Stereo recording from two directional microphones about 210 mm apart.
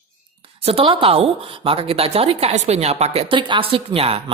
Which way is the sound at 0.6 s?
25° right (ahead or behind).